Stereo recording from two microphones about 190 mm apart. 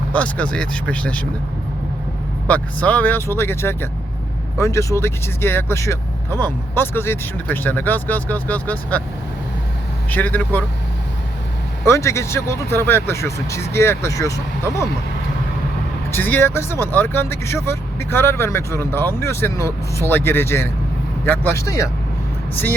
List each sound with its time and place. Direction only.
0.1 s speech: 5° left (ahead or behind)
2.5 s speech: 10° left (ahead or behind)
10.1 s speech: 10° left (ahead or behind)
11.9 s speech: 15° left (ahead or behind)
16.1 s speech: 10° left (ahead or behind)